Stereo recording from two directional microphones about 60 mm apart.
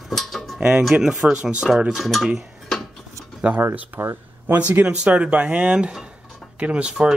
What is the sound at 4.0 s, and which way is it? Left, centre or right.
Speech, right.